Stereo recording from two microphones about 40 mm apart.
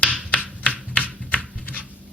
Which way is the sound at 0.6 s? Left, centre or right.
Left.